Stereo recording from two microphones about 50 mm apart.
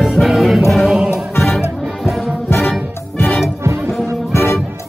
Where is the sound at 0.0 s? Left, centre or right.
Centre.